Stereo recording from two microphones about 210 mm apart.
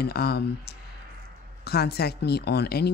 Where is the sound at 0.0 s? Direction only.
50° left (ahead or behind).